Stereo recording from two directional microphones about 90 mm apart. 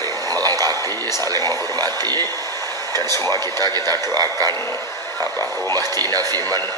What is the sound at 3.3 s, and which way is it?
Speech, 45° right (ahead or behind).